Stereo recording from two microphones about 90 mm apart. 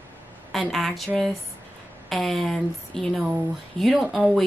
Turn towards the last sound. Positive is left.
turn(degrees=0)  # may be behind; listen again after turning